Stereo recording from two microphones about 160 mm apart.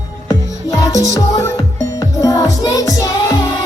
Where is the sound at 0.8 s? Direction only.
20° left (ahead or behind).